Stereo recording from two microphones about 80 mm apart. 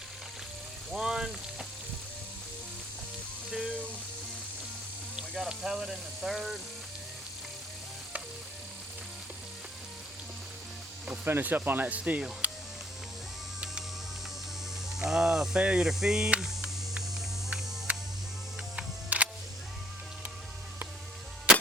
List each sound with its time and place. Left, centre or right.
0.9 s speech: centre
3.5 s music: centre
5.3 s speech: centre
11.3 s speech: right
12.4 s music: centre
14.9 s mains hum: centre
17.9 s music: centre